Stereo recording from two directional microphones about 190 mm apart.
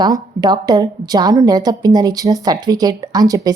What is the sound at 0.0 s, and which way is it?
A woman's voice, 20° right (ahead or behind).